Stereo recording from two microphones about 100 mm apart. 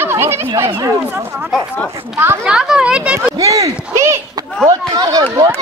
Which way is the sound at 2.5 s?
10° right (ahead or behind).